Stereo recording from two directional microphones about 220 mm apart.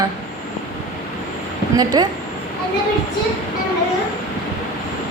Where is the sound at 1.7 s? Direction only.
20° right (ahead or behind).